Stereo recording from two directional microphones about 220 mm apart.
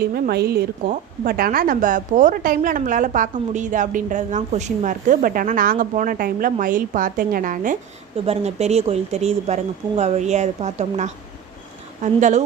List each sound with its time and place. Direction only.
0.1 s a woman's voice: 45° right (ahead or behind)